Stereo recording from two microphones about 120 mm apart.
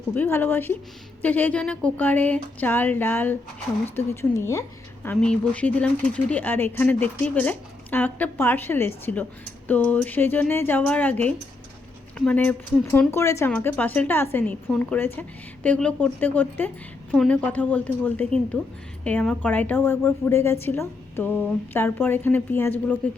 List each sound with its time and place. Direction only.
0.1 s speech: 15° left (ahead or behind)
5.1 s speech: 5° left (ahead or behind)
17.1 s a woman's voice: centre (ahead or behind)
17.3 s speech: 15° left (ahead or behind)